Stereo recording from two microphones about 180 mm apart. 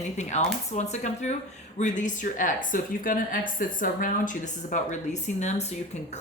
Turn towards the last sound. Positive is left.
turn(degrees=40)  # may be behind; listen again after turning